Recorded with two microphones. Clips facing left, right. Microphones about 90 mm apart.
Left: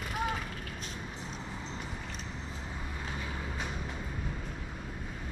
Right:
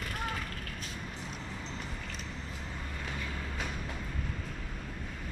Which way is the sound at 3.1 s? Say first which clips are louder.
Left 1 dB; 15° left (ahead or behind).